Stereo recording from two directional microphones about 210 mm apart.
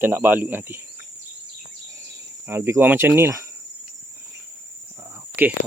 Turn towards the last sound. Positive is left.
turn(degrees=-10)  # may be behind; listen again after turning